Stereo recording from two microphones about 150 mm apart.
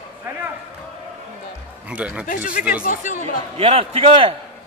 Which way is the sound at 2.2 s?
70° left (ahead or behind).